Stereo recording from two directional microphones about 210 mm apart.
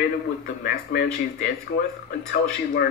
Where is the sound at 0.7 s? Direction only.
45° left (ahead or behind).